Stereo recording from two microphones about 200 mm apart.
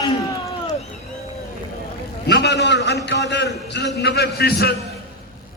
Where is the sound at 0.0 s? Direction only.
20° left (ahead or behind).